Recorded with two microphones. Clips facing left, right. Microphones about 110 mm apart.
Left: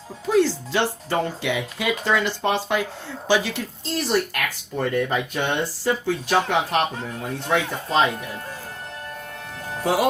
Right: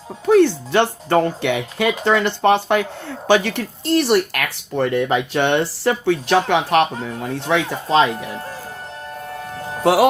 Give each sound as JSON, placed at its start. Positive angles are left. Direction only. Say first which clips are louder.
{"t": 0.3, "sound": "speech", "louder": "right 6 dB", "side_deg": -60}
{"t": 7.3, "sound": "speech", "louder": "right 3 dB", "side_deg": -90}
{"t": 9.8, "sound": "speech", "louder": "right 7 dB", "side_deg": -90}